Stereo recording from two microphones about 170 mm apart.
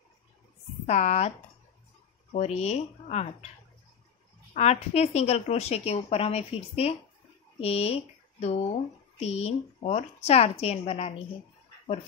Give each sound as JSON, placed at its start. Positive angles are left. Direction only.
{"t": 0.8, "sound": "speech", "side_deg": 40}
{"t": 2.3, "sound": "a woman's voice", "side_deg": 40}
{"t": 4.6, "sound": "a woman's voice", "side_deg": 40}